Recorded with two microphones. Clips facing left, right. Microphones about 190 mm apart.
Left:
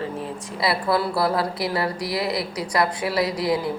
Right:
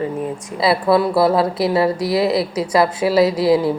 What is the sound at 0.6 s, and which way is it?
A woman's voice, 25° right (ahead or behind).